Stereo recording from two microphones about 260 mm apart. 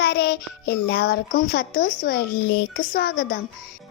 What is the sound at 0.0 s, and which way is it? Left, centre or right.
A child's voice, left.